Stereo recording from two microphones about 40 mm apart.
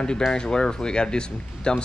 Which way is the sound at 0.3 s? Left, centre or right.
Centre.